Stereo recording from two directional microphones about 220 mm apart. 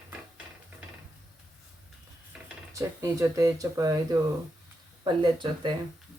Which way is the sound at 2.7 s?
15° right (ahead or behind).